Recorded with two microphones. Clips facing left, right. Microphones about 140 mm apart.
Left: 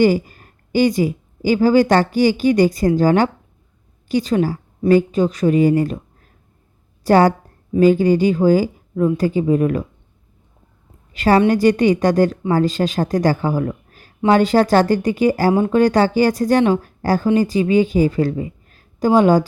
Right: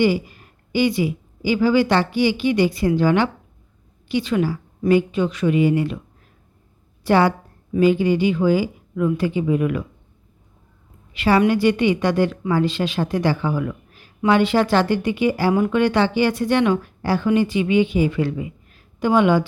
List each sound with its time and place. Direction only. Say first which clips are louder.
0.0 s speech: left 4 dB; 45° left (ahead or behind)
7.0 s a woman's voice: left 4 dB; 40° left (ahead or behind)
11.1 s speech: left 3 dB; 40° left (ahead or behind)